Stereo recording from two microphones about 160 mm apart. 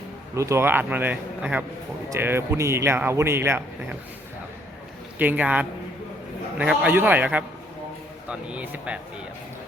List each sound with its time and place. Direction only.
0.3 s speech: 20° right (ahead or behind)
5.1 s speech: 10° right (ahead or behind)